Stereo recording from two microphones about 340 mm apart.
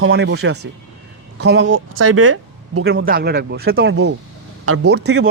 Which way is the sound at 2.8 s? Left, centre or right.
Right.